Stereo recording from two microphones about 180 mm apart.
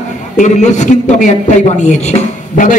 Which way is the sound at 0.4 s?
40° left (ahead or behind).